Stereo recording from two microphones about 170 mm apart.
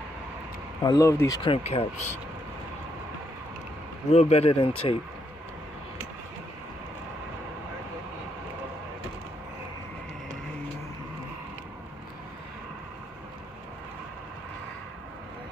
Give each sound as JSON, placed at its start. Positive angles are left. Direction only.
{"t": 0.8, "sound": "speech", "side_deg": 20}
{"t": 1.4, "sound": "speech", "side_deg": 35}
{"t": 4.1, "sound": "speech", "side_deg": 40}